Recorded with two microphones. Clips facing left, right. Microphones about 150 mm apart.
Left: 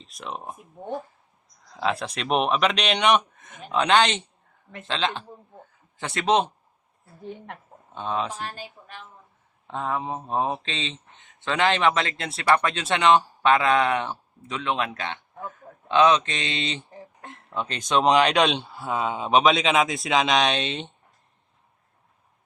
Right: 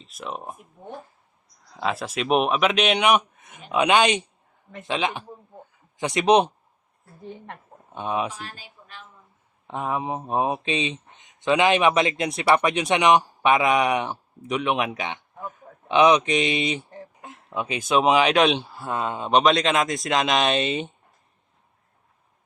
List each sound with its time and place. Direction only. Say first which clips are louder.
0.0 s speech: right 1 dB; 5° right (ahead or behind)
1.7 s speech: even; 5° right (ahead or behind)
7.0 s speech: left 1 dB; centre (ahead or behind)
7.9 s speech: right 2 dB; 15° right (ahead or behind)
8.4 s speech: left 5 dB; 45° left (ahead or behind)
9.6 s speech: right 1 dB; 15° right (ahead or behind)